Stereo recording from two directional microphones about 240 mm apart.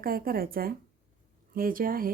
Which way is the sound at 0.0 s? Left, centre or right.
Right.